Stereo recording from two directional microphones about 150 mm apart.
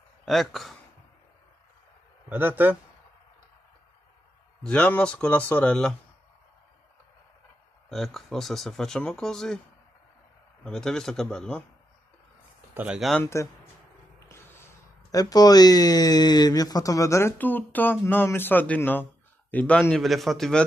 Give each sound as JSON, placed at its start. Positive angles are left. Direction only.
{"t": 0.2, "sound": "speech", "side_deg": 0}
{"t": 2.2, "sound": "a man's voice", "side_deg": -15}
{"t": 4.6, "sound": "speech", "side_deg": 10}
{"t": 7.9, "sound": "speech", "side_deg": 0}
{"t": 10.6, "sound": "speech", "side_deg": 5}
{"t": 12.7, "sound": "speech", "side_deg": -5}
{"t": 13.2, "sound": "speech", "side_deg": 20}